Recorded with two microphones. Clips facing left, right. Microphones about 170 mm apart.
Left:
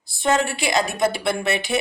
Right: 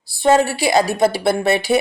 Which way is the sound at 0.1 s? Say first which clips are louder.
Right 6 dB; 30° right (ahead or behind).